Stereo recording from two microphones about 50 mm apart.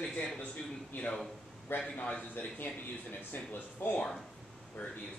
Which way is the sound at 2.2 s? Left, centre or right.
Left.